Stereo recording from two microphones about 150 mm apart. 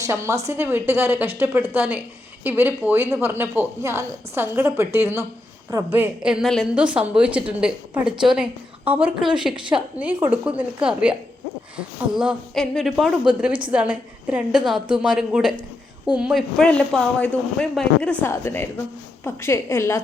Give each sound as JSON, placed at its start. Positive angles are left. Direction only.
{"t": 0.0, "sound": "a woman's voice", "side_deg": -20}
{"t": 12.1, "sound": "a woman's voice", "side_deg": -5}